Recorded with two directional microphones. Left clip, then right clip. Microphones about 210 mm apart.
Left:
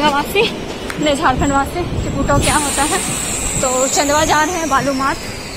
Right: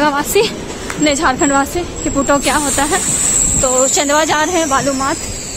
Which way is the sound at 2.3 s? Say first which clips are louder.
Even; 50° right (ahead or behind).